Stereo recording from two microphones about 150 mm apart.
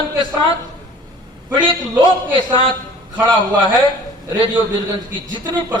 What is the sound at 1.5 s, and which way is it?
Speech, 30° right (ahead or behind).